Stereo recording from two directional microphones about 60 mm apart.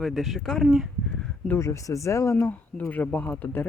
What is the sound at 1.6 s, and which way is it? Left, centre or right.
Speech, left.